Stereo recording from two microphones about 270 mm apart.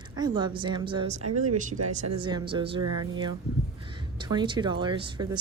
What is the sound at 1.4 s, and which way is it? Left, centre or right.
Speech, right.